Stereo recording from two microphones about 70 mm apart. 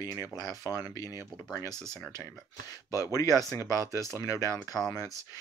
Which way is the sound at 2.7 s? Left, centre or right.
Left.